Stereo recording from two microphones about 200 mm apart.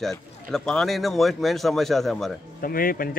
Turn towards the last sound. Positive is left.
turn(degrees=45)  # may be behind; listen again after turning